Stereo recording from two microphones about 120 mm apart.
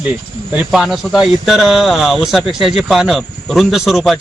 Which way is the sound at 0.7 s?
Centre (ahead or behind).